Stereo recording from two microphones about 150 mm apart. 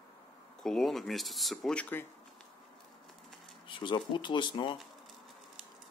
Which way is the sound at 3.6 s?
35° left (ahead or behind).